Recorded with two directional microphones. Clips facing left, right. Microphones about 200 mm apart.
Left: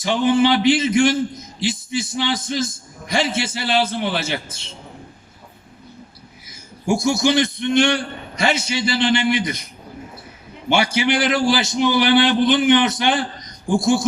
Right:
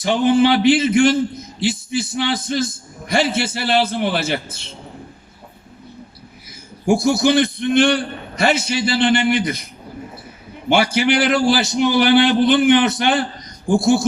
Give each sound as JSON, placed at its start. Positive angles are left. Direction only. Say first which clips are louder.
{"t": 0.0, "sound": "a man's voice", "louder": "right 2 dB", "side_deg": -55}
{"t": 6.9, "sound": "a man's voice", "louder": "right 3 dB", "side_deg": -60}
{"t": 10.7, "sound": "a man's voice", "louder": "right 2 dB", "side_deg": -55}